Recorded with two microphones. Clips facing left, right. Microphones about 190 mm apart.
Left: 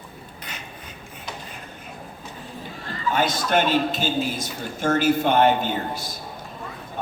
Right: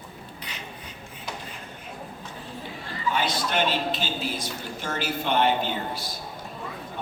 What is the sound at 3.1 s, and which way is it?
A man's voice, 45° left (ahead or behind).